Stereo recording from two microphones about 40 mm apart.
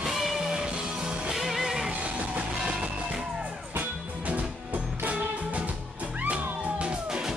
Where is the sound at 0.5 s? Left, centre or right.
Right.